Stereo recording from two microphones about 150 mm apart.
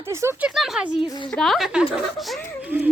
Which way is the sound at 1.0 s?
30° left (ahead or behind).